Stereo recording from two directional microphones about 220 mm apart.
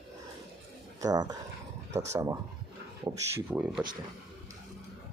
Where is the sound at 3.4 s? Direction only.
5° right (ahead or behind).